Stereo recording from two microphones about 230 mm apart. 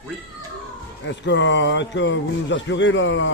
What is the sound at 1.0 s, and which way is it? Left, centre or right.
Speech, left.